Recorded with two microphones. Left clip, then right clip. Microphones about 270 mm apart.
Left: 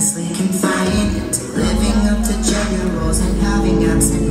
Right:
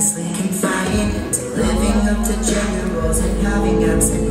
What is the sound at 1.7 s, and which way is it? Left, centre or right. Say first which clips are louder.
Music: even; right.